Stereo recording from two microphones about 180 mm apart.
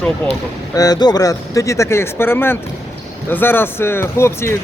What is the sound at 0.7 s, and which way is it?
Speech, 20° left (ahead or behind).